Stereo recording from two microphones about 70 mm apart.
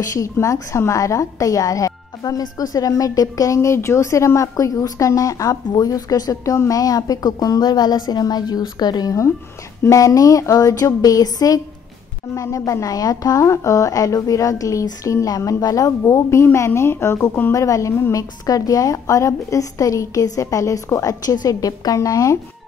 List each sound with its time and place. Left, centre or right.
0.1 s a woman's voice: left
5.7 s speech: left
6.5 s a woman's voice: left
6.8 s a woman's voice: left
9.8 s a woman's voice: left
17.5 s a woman's voice: left